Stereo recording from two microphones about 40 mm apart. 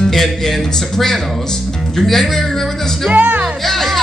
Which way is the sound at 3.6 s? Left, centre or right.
Centre.